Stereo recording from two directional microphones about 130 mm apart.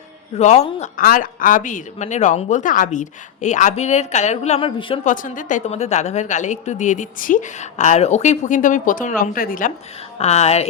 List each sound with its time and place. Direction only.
0.3 s speech: 60° left (ahead or behind); by 4.9 s 40° left (ahead or behind)
5.0 s a woman's voice: 90° left
10.2 s speech: 55° left (ahead or behind)